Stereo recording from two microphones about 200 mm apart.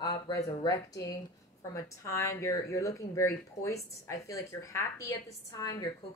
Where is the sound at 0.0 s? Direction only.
20° left (ahead or behind).